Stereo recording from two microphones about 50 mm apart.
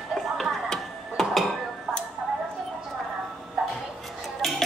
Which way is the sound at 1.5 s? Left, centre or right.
Centre.